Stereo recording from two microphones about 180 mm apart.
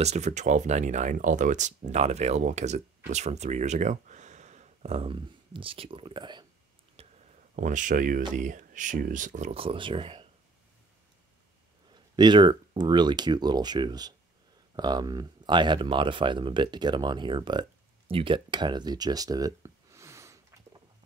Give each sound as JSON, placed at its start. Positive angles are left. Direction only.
{"t": 0.0, "sound": "speech", "side_deg": -40}
{"t": 7.0, "sound": "a sound", "side_deg": -35}
{"t": 7.5, "sound": "speech", "side_deg": -45}
{"t": 11.9, "sound": "speech", "side_deg": -25}